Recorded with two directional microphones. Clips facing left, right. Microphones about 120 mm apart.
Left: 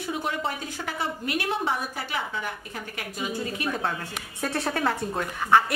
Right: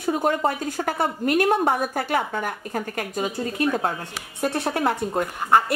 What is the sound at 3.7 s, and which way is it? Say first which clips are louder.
Speech: right 4 dB; 35° right (ahead or behind).